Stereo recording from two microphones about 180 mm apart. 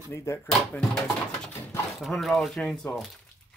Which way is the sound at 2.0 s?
Centre (ahead or behind).